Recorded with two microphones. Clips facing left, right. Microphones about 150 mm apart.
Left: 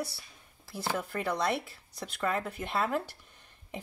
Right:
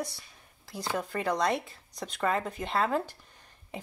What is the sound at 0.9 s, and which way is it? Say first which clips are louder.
Speech: right 3 dB; 15° right (ahead or behind).